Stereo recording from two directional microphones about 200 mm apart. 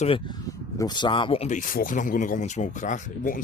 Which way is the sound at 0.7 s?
20° left (ahead or behind).